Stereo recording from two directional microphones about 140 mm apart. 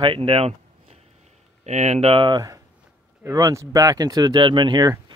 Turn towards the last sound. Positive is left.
turn(degrees=-35)  # may be behind; listen again after turning